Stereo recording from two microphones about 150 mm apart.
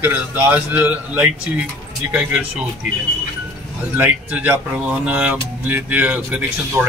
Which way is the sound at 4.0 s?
10° right (ahead or behind).